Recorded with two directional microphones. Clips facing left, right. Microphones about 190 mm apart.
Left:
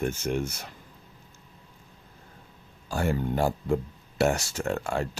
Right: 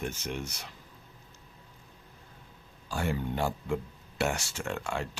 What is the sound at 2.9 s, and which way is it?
Speech, 45° left (ahead or behind).